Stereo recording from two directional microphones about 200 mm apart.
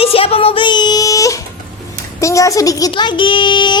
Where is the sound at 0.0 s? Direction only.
30° left (ahead or behind).